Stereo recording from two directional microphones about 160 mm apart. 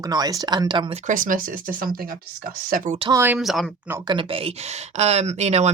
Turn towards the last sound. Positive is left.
turn(degrees=-45)  # may be behind; listen again after turning